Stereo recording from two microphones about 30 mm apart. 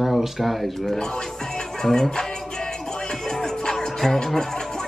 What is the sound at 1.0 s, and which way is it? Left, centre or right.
Music, centre.